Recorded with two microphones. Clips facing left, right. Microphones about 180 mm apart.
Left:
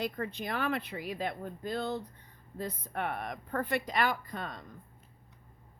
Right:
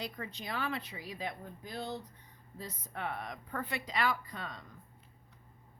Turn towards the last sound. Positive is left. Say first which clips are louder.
# left 3 dB
turn(degrees=50)  # may be behind; listen again after turning